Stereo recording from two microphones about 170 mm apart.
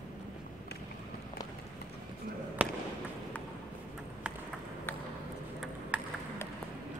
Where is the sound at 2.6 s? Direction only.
10° right (ahead or behind).